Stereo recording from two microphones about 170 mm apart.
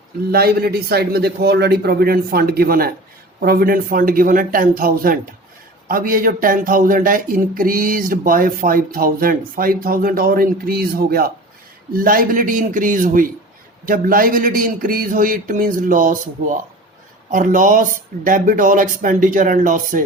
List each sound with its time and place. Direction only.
0.3 s a man's voice: 65° right (ahead or behind)